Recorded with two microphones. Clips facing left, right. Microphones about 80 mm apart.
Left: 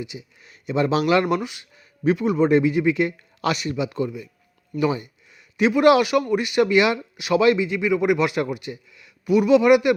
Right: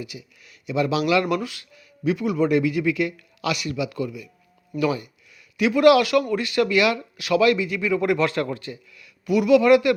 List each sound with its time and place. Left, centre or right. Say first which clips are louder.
0.0 s speech: left 2 dB; left
1.4 s a man's voice: even; left